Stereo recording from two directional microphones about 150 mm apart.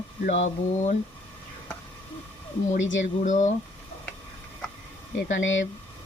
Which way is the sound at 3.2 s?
55° left (ahead or behind).